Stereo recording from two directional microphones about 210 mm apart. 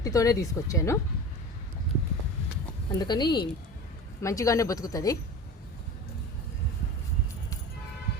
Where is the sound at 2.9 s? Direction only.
20° left (ahead or behind).